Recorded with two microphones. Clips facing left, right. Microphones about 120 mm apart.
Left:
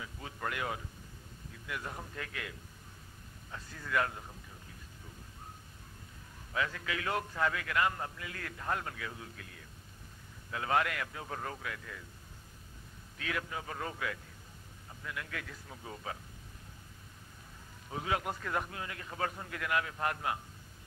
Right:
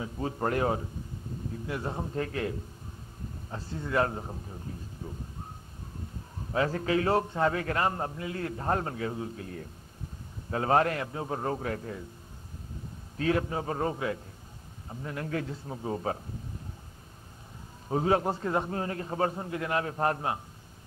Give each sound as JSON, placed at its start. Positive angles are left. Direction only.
{"t": 0.0, "sound": "a man's voice", "side_deg": -35}
{"t": 6.5, "sound": "a man's voice", "side_deg": -40}
{"t": 13.2, "sound": "a man's voice", "side_deg": -35}
{"t": 17.8, "sound": "a man's voice", "side_deg": -35}